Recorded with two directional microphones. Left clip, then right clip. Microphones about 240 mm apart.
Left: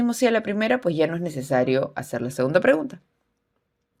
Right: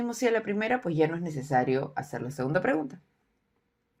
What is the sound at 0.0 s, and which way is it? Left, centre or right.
Speech, left.